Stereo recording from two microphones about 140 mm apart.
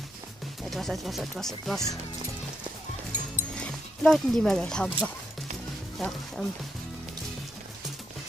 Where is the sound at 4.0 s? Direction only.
5° left (ahead or behind).